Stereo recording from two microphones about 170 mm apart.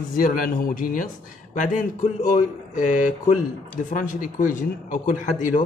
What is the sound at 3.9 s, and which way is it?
Speech, 50° left (ahead or behind).